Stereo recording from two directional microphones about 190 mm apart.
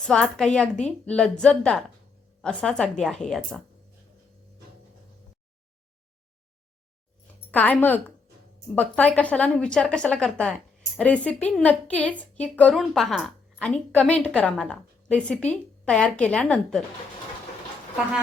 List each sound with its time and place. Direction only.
0.1 s a woman's voice: 5° left (ahead or behind)
7.5 s a woman's voice: 10° left (ahead or behind)